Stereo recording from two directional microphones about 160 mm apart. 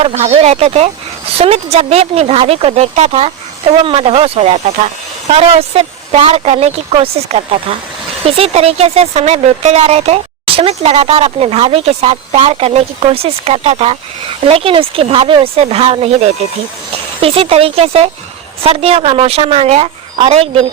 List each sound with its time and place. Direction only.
0.0 s speech: 40° right (ahead or behind)